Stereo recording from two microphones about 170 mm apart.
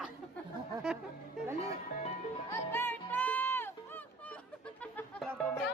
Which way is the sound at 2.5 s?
15° left (ahead or behind).